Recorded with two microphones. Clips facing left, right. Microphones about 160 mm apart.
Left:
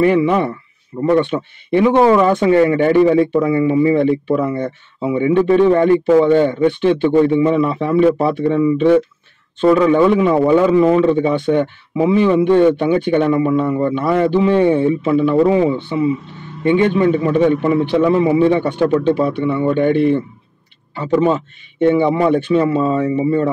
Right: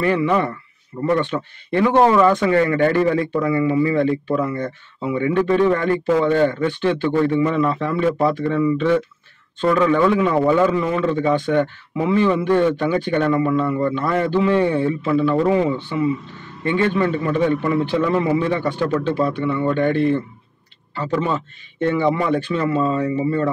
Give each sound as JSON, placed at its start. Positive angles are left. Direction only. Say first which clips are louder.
{"t": 0.0, "sound": "a man's voice", "louder": "left 5 dB", "side_deg": 15}